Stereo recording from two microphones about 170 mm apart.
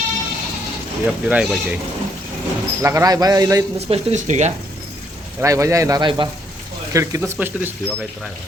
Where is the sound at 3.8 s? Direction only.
40° right (ahead or behind).